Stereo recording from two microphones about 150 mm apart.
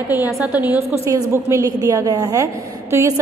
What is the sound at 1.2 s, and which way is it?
A woman's voice, 20° right (ahead or behind).